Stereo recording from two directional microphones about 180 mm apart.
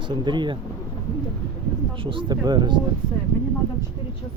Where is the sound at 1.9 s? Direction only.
30° right (ahead or behind).